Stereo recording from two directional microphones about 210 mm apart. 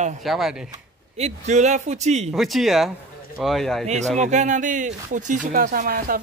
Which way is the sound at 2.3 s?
Centre (ahead or behind).